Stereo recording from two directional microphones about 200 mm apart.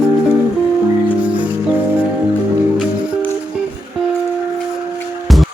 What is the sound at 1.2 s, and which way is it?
Music, 5° right (ahead or behind).